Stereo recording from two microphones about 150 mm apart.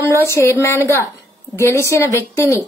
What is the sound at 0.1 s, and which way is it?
Speech, 20° left (ahead or behind).